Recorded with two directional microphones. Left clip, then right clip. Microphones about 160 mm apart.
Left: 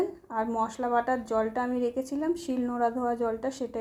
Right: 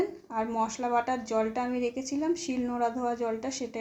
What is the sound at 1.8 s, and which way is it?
Speech, 55° left (ahead or behind).